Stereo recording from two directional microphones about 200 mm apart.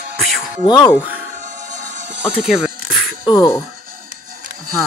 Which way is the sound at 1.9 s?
60° right (ahead or behind).